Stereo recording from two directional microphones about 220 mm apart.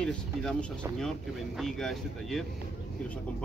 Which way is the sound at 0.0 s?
5° left (ahead or behind).